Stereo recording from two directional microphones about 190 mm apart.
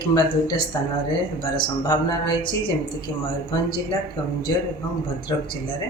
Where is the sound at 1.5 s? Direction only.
20° left (ahead or behind).